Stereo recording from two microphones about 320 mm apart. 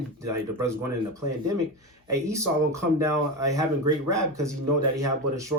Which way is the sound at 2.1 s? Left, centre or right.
Centre.